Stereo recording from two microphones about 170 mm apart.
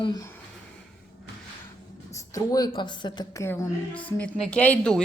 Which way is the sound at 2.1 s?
20° left (ahead or behind).